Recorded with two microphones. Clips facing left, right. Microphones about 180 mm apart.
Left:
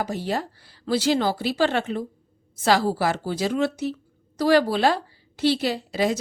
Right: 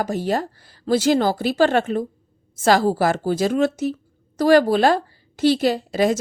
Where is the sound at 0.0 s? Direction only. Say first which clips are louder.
Right 4 dB; 45° right (ahead or behind).